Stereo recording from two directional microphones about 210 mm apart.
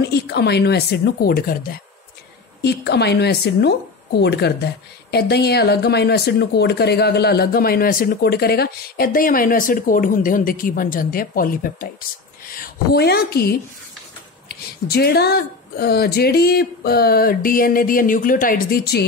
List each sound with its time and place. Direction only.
0.0 s speech: 50° left (ahead or behind)
12.9 s speech: 50° left (ahead or behind)